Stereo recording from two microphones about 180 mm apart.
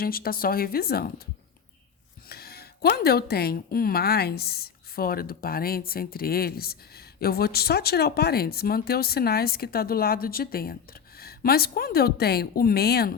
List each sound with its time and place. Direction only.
0.0 s a woman's voice: 55° left (ahead or behind)
2.3 s a woman's voice: 60° left (ahead or behind)